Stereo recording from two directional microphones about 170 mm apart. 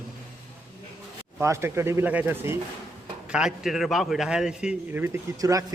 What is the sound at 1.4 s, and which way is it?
A man's voice, 15° right (ahead or behind).